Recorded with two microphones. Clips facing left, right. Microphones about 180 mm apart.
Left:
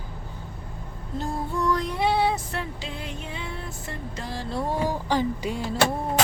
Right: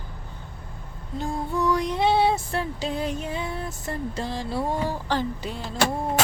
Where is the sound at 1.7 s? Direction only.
20° right (ahead or behind); by 4.3 s 35° right (ahead or behind).